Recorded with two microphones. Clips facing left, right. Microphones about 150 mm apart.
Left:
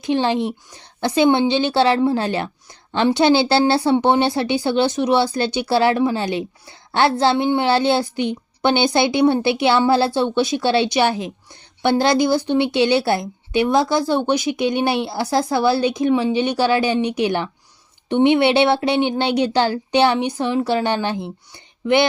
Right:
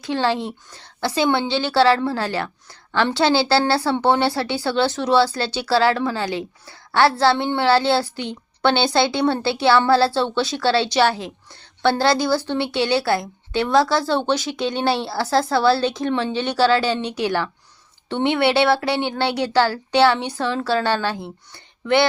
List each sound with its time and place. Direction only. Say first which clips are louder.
0.0 s a woman's voice: left 3 dB; 20° left (ahead or behind)